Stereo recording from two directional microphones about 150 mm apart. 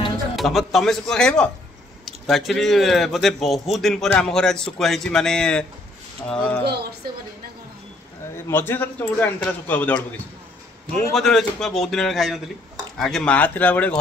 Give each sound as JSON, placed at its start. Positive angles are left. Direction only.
{"t": 0.4, "sound": "a man's voice", "side_deg": 0}
{"t": 6.6, "sound": "speech", "side_deg": -90}
{"t": 8.5, "sound": "a man's voice", "side_deg": 15}